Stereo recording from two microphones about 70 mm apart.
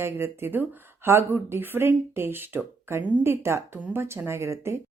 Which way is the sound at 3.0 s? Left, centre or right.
Right.